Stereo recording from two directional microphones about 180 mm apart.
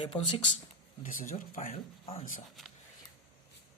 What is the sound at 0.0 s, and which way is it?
Speech, 30° left (ahead or behind).